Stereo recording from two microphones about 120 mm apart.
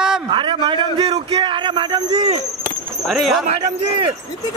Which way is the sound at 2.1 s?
65° right (ahead or behind).